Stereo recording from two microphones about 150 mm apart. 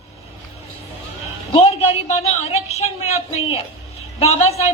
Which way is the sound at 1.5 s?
45° left (ahead or behind).